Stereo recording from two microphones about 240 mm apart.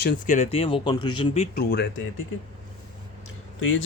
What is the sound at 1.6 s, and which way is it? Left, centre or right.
Speech, left.